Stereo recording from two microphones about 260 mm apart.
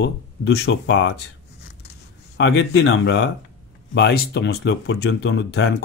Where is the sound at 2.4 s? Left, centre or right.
Left.